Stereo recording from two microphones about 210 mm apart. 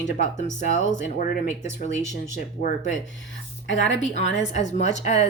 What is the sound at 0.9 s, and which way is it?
Speech, 40° left (ahead or behind).